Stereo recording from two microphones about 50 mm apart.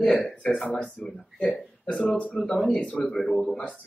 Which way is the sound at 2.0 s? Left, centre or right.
Left.